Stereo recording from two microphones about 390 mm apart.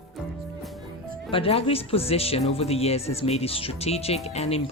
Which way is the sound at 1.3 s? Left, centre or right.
Centre.